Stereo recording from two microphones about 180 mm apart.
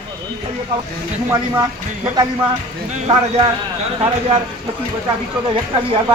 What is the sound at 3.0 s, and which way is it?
Speech, 35° right (ahead or behind).